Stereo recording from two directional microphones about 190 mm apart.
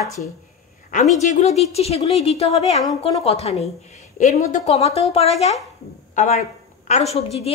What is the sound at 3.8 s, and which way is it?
A woman's voice, 35° left (ahead or behind).